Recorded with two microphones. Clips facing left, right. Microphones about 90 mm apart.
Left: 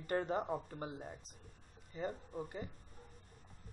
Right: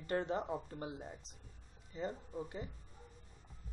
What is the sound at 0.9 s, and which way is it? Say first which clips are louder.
Speech: even; centre (ahead or behind).